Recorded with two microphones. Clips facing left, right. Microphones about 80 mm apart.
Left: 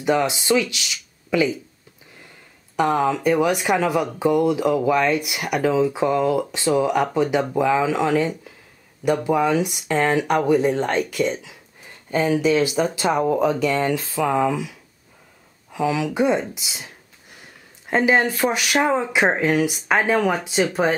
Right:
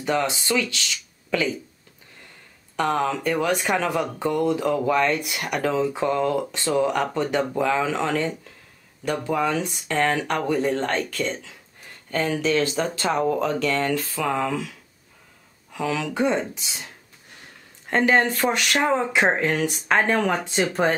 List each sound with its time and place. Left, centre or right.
0.0 s speech: centre
2.7 s speech: centre